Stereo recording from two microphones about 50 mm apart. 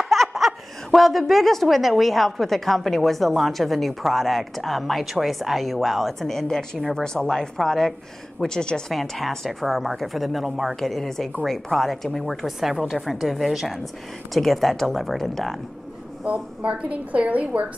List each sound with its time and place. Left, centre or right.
0.0 s laughter: centre
0.9 s a woman's voice: centre
8.9 s a woman's voice: centre
12.4 s a woman's voice: centre
16.3 s a woman's voice: right